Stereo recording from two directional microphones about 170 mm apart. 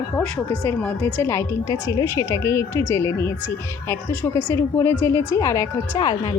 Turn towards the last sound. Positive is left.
turn(degrees=20)  # may be behind; listen again after turning